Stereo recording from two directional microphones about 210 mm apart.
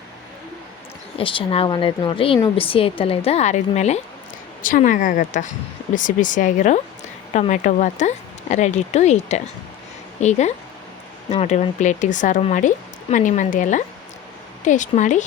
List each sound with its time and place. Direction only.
1.2 s a woman's voice: 25° left (ahead or behind)